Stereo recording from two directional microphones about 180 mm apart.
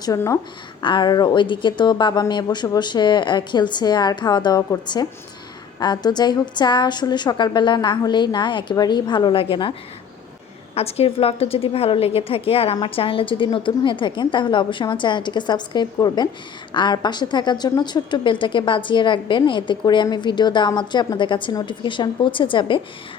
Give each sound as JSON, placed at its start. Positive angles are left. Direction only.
{"t": 0.0, "sound": "a woman's voice", "side_deg": 20}
{"t": 10.8, "sound": "a woman's voice", "side_deg": 35}